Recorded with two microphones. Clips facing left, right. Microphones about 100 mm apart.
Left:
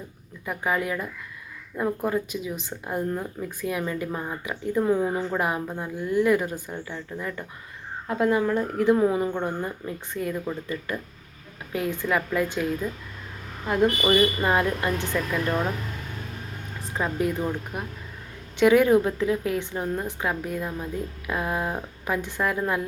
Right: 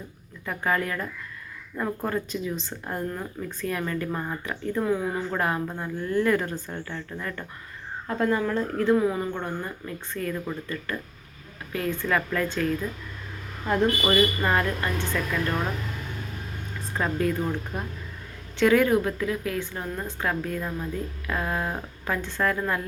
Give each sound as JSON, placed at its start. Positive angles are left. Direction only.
{"t": 0.4, "sound": "speech", "side_deg": 15}
{"t": 4.8, "sound": "a woman's voice", "side_deg": 25}
{"t": 5.3, "sound": "a woman's voice", "side_deg": 15}
{"t": 14.0, "sound": "speech", "side_deg": 15}
{"t": 17.0, "sound": "a woman's voice", "side_deg": 15}